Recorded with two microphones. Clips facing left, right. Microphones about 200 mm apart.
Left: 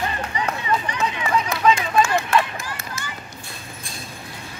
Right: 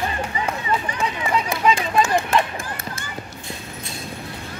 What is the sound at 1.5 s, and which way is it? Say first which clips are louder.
Run: left 1 dB; 15° right (ahead or behind).